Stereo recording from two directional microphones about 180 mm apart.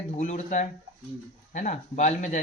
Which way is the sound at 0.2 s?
45° left (ahead or behind).